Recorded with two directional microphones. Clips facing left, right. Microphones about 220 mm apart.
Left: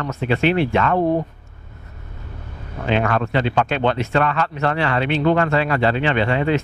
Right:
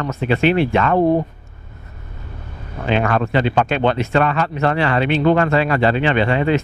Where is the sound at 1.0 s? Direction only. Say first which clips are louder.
Right 3 dB; 35° right (ahead or behind).